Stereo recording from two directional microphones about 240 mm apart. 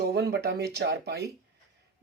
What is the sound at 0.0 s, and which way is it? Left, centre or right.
Speech, right.